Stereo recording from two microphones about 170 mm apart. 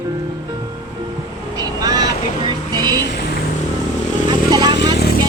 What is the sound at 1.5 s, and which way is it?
Vehicle, 20° right (ahead or behind).